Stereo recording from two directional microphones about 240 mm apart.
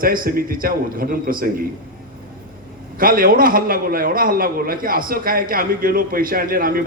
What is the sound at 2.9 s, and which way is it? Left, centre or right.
A man's voice, right.